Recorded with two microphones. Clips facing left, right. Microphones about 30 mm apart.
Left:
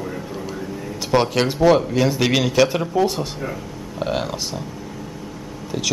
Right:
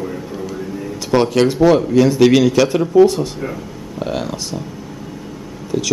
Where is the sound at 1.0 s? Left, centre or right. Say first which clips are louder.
Right 4 dB; centre.